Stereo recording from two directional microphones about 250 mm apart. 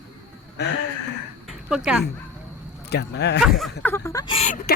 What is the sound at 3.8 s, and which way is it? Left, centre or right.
Speech, centre.